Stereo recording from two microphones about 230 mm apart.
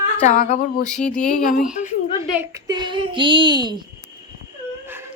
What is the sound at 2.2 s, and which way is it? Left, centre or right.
A child's voice, centre.